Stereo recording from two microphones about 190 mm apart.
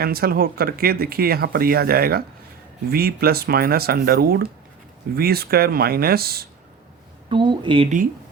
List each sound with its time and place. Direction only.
0.0 s speech: 50° right (ahead or behind)
7.3 s speech: 25° right (ahead or behind)